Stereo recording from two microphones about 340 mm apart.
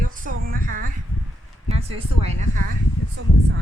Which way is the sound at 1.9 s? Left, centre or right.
Centre.